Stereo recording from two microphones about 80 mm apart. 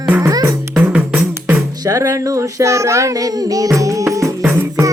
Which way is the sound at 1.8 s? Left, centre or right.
Right.